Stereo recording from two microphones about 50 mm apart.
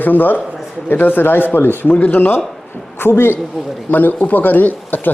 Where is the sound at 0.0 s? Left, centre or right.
Left.